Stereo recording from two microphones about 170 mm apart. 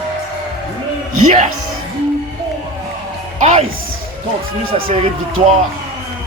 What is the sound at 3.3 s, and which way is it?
Speech, 40° right (ahead or behind).